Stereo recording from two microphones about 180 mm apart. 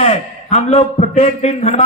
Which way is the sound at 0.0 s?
35° left (ahead or behind).